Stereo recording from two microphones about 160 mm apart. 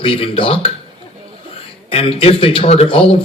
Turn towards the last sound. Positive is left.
turn(degrees=35)  # may be behind; listen again after turning